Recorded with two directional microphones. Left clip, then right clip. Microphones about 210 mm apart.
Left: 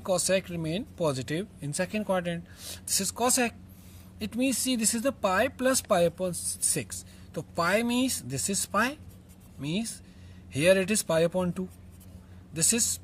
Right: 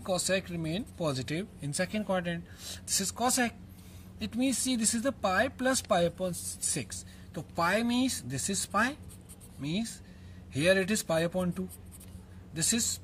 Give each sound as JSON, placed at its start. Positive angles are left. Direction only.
{"t": 0.0, "sound": "speech", "side_deg": 40}
{"t": 7.3, "sound": "speech", "side_deg": 35}